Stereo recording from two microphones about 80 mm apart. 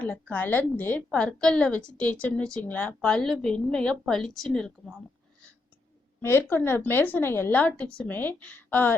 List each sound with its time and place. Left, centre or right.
0.0 s a woman's voice: centre
6.2 s a woman's voice: left
7.6 s a woman's voice: centre